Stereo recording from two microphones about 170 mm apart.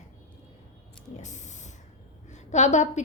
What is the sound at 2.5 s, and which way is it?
Speech, 45° left (ahead or behind).